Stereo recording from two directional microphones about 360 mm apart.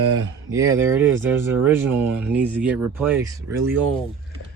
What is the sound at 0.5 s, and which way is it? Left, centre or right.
Speech, centre.